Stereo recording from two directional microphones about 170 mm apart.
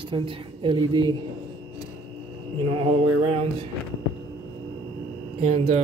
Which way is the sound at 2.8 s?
35° right (ahead or behind).